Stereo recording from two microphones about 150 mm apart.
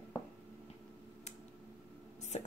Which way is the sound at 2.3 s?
50° left (ahead or behind).